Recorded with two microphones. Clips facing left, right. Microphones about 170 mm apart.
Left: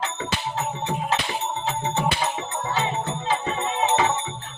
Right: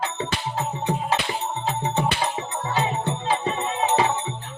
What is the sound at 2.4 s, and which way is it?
Music, 10° right (ahead or behind).